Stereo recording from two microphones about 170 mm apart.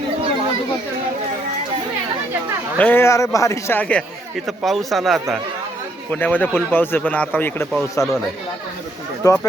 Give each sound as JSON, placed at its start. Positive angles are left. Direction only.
{"t": 2.7, "sound": "speech", "side_deg": 10}
{"t": 6.1, "sound": "speech", "side_deg": 10}
{"t": 9.2, "sound": "speech", "side_deg": 15}